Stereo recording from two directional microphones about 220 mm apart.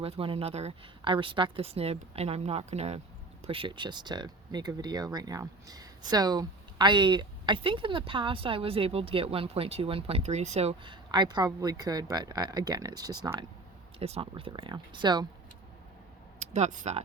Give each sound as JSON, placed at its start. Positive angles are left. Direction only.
{"t": 0.0, "sound": "speech", "side_deg": -25}
{"t": 16.4, "sound": "speech", "side_deg": -30}